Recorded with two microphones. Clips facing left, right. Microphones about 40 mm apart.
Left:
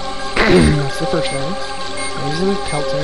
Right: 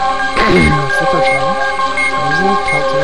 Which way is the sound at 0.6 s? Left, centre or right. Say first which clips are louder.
Right 4 dB; right.